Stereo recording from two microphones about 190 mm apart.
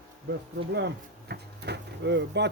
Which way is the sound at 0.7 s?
65° right (ahead or behind).